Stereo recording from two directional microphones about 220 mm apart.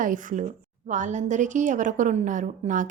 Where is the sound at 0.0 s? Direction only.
35° right (ahead or behind).